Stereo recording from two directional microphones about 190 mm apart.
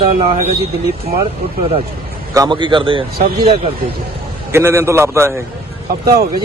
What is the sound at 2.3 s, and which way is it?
Speech, 20° right (ahead or behind).